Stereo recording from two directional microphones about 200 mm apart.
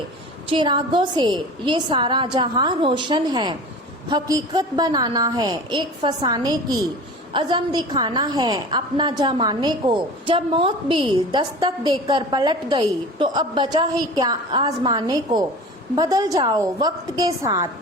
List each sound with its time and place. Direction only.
0.5 s a woman's voice: 25° right (ahead or behind)